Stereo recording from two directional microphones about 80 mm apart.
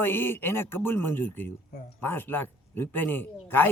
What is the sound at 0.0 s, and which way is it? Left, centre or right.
A man's voice, left.